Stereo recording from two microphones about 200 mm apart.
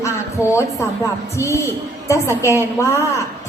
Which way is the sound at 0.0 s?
15° left (ahead or behind).